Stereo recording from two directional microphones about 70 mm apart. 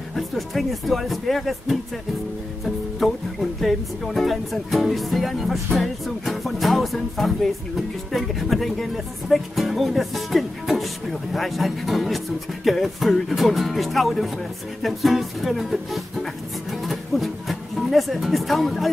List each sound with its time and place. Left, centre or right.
0.1 s speech: centre
16.7 s music: centre